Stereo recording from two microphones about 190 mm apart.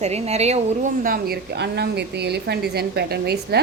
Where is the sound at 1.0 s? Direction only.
50° right (ahead or behind).